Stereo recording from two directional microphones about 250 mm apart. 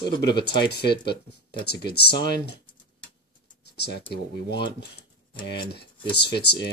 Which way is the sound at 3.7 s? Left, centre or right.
Left.